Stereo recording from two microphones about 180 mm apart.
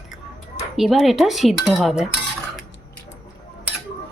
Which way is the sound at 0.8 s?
Centre (ahead or behind).